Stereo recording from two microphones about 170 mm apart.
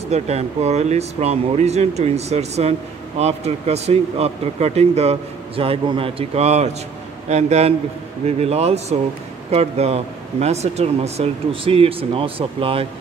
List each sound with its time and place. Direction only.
0.1 s speech: 40° right (ahead or behind)